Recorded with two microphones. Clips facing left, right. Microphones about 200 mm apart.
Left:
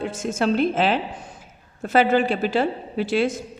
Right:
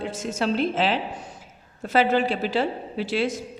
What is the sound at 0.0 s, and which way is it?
Speech, 50° left (ahead or behind).